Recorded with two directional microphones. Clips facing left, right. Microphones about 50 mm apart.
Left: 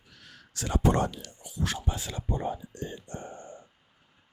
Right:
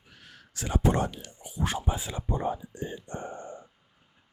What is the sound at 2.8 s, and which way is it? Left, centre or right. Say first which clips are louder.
Speech: right 2 dB; centre.